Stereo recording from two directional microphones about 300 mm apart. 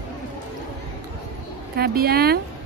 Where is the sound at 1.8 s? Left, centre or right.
Right.